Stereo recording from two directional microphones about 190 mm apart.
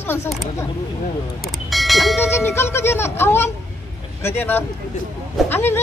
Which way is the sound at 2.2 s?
15° left (ahead or behind).